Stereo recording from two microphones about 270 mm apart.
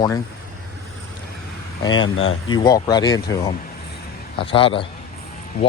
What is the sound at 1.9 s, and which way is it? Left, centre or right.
Speech, left.